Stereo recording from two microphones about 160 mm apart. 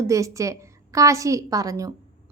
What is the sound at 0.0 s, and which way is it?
A woman's voice, 20° right (ahead or behind).